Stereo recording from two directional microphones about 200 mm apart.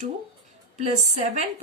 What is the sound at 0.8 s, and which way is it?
Speech, 35° right (ahead or behind).